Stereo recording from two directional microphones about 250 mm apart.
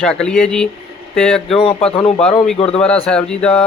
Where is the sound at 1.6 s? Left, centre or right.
Left.